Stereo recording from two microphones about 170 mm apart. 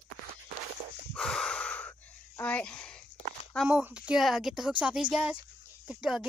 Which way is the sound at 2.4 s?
10° left (ahead or behind).